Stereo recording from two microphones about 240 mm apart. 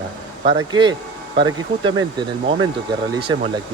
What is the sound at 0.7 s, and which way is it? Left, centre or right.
Speech, centre.